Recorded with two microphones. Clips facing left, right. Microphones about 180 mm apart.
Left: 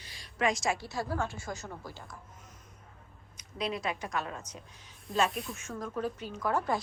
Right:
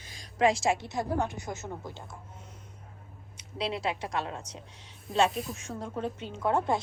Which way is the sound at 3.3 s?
30° right (ahead or behind).